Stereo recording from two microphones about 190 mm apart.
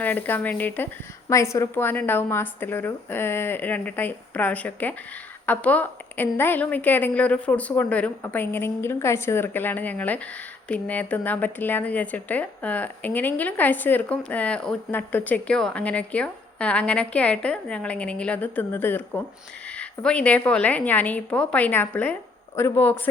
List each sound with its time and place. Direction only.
0.0 s a woman's voice: 10° left (ahead or behind)